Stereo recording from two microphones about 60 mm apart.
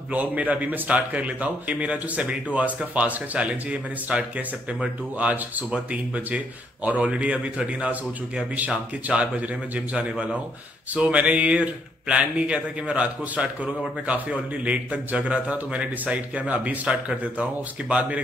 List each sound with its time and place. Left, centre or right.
0.1 s speech: right
5.2 s speech: right